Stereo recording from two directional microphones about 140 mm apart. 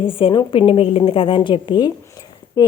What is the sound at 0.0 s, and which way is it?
A woman's voice, 40° left (ahead or behind).